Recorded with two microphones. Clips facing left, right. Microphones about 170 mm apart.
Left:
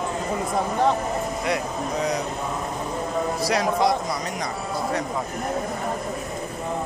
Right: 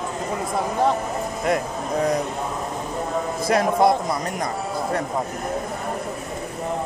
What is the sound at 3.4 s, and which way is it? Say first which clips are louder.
Speech: right 5 dB; 50° right (ahead or behind).